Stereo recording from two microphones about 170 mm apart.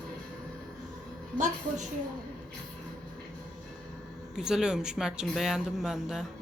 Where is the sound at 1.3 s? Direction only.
45° right (ahead or behind).